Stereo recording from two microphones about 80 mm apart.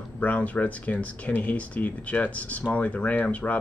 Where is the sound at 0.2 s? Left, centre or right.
Centre.